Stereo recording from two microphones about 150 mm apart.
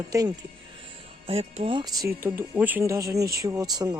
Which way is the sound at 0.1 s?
25° right (ahead or behind).